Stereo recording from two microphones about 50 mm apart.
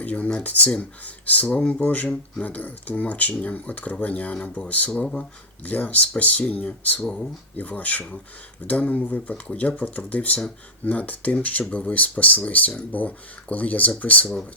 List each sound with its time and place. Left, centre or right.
0.0 s speech: left